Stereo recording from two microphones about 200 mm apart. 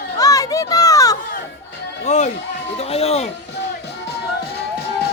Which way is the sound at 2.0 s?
35° left (ahead or behind).